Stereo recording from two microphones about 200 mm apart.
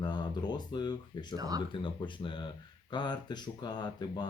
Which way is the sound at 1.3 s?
20° right (ahead or behind).